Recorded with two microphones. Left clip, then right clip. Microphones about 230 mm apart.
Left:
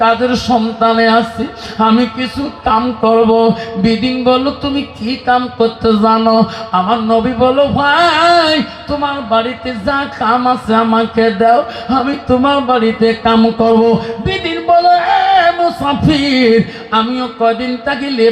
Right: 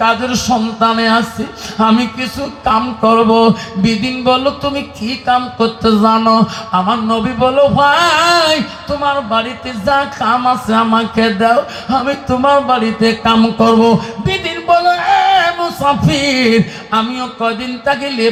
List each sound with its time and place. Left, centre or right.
0.0 s speech: right